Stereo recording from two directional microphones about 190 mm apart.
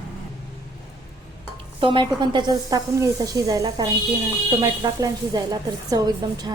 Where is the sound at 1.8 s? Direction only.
25° right (ahead or behind).